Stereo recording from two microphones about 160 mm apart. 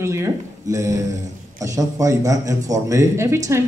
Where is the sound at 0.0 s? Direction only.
20° right (ahead or behind).